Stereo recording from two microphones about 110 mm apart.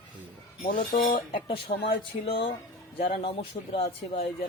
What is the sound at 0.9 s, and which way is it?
Speech, 55° left (ahead or behind).